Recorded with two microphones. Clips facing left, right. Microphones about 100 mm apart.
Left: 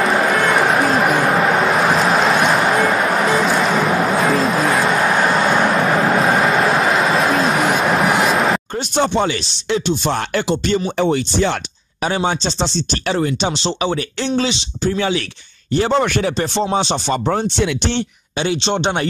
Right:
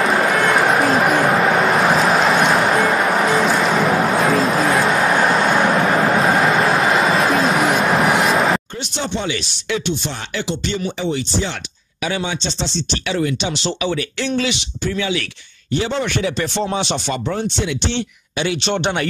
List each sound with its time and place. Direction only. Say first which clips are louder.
0.0 s a sound: even; centre (ahead or behind)
3.3 s music: even; centre (ahead or behind)
4.2 s a sound: even; centre (ahead or behind)
5.3 s vehicle: even; centre (ahead or behind)
6.4 s a sound: even; centre (ahead or behind)
8.9 s speech: left 7 dB; 50° left (ahead or behind)
9.7 s speech: left 4 dB; 35° left (ahead or behind)
10.3 s speech: left 2 dB; 50° left (ahead or behind)
12.0 s speech: left 4 dB; 35° left (ahead or behind)